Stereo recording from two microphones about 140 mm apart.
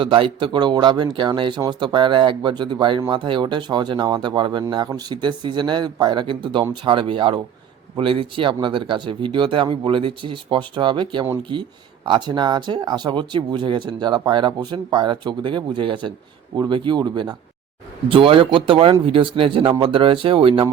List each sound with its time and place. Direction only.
0.0 s speech: 35° right (ahead or behind)